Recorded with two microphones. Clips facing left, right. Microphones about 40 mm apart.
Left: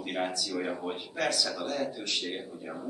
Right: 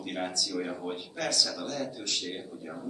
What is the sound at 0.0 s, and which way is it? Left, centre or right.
Speech, centre.